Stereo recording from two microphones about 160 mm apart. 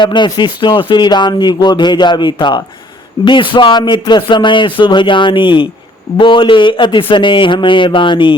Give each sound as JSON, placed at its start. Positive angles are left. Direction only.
{"t": 0.0, "sound": "speech", "side_deg": 30}